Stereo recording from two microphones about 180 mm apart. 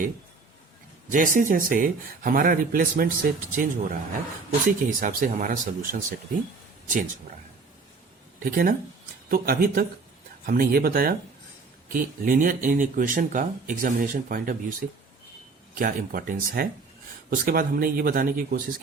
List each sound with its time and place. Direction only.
1.1 s speech: 45° right (ahead or behind)
8.4 s speech: 50° right (ahead or behind)